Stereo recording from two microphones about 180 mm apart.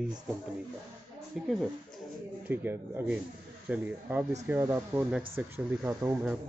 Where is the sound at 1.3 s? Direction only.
5° right (ahead or behind).